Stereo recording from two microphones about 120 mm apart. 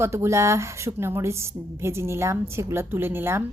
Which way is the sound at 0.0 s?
20° right (ahead or behind).